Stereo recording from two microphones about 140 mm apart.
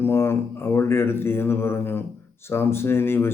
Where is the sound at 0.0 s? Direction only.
15° left (ahead or behind).